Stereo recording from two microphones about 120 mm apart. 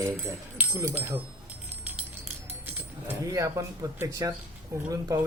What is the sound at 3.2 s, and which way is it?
A man's voice, 30° right (ahead or behind).